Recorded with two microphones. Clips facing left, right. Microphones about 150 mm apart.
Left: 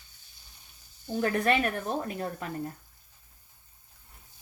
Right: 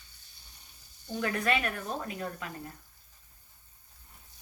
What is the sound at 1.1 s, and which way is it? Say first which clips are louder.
A woman's voice: left 4 dB; 35° left (ahead or behind).